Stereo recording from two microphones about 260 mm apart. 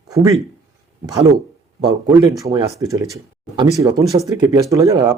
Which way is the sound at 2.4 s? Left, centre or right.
Centre.